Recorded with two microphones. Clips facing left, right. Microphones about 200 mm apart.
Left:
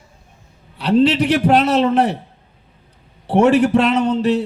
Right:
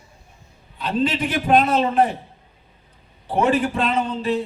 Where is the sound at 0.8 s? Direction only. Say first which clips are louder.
Left 8 dB; 75° left (ahead or behind).